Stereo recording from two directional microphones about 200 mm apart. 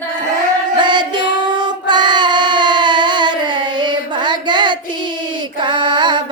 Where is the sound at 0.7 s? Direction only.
20° right (ahead or behind).